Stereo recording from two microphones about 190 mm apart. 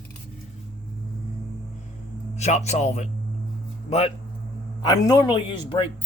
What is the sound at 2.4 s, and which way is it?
Speech, 35° left (ahead or behind).